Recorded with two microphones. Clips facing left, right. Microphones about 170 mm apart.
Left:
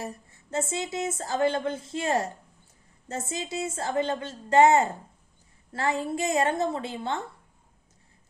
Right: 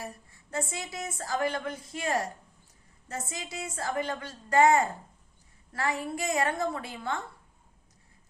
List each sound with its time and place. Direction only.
0.0 s a woman's voice: 25° left (ahead or behind)